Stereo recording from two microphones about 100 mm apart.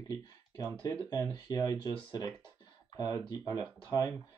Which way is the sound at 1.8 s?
45° left (ahead or behind).